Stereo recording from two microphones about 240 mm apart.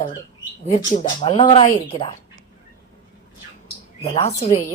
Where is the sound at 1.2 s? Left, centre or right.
Left.